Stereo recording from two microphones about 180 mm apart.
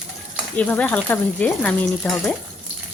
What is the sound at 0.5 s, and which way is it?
Speech, 10° left (ahead or behind).